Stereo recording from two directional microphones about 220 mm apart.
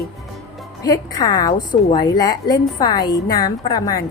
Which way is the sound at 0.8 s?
15° left (ahead or behind).